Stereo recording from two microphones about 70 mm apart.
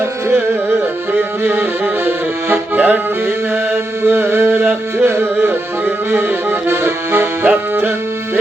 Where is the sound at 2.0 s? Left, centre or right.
Right.